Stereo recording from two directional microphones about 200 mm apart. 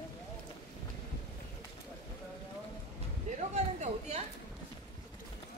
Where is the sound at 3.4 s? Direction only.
35° right (ahead or behind).